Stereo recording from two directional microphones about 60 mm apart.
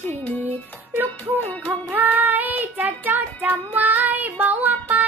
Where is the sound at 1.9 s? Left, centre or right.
Right.